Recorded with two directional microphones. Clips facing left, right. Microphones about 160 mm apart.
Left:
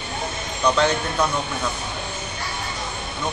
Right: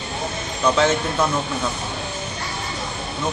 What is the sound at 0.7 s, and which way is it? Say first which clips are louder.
Speech: right 1 dB; centre (ahead or behind).